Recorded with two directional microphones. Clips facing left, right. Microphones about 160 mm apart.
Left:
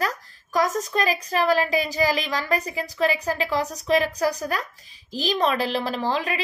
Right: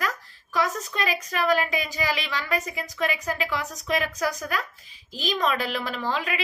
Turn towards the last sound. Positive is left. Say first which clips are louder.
# left 3 dB
turn(degrees=35)  # may be behind; listen again after turning